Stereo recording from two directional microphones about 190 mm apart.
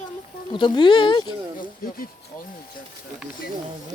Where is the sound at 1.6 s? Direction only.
50° left (ahead or behind).